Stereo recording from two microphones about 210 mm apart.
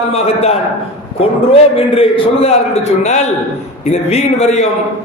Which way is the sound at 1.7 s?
25° left (ahead or behind).